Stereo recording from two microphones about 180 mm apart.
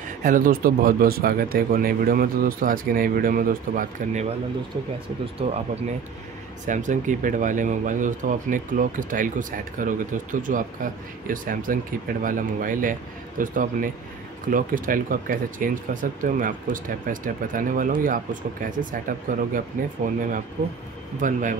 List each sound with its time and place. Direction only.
0.2 s speech: 50° right (ahead or behind)
6.6 s speech: 45° right (ahead or behind)